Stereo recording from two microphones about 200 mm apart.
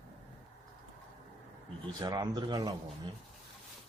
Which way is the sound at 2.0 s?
20° right (ahead or behind).